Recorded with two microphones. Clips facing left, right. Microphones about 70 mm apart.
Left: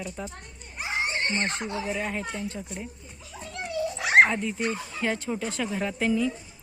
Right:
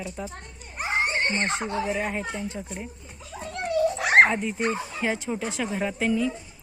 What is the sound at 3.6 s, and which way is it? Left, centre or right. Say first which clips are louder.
Dog: right 6 dB; right.